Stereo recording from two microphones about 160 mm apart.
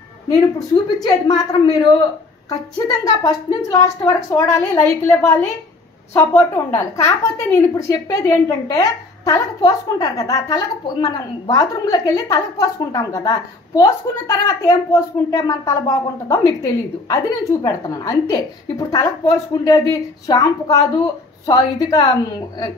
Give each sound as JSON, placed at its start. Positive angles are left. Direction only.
{"t": 0.3, "sound": "a woman's voice", "side_deg": 25}